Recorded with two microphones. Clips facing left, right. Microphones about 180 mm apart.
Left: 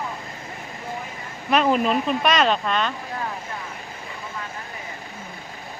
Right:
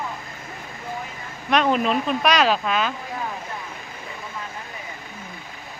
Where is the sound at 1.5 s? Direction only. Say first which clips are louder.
Left 1 dB; centre (ahead or behind).